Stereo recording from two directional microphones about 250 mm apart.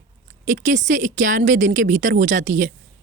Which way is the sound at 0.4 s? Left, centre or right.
Right.